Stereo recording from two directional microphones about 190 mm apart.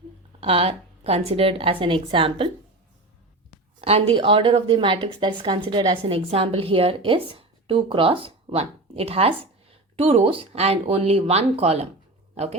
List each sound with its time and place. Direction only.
0.3 s a woman's voice: 30° right (ahead or behind)
3.8 s a woman's voice: 30° right (ahead or behind)